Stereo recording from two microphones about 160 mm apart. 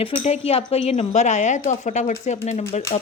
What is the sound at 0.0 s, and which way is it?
A woman's voice, 40° left (ahead or behind).